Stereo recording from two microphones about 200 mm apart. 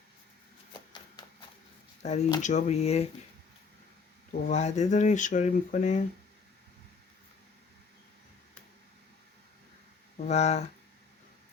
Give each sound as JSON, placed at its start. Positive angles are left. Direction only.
{"t": 0.7, "sound": "horse", "side_deg": 20}
{"t": 2.0, "sound": "speech", "side_deg": 35}
{"t": 4.3, "sound": "speech", "side_deg": 35}
{"t": 10.2, "sound": "speech", "side_deg": 35}